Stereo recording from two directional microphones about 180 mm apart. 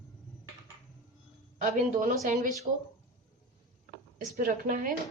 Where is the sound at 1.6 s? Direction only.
45° right (ahead or behind).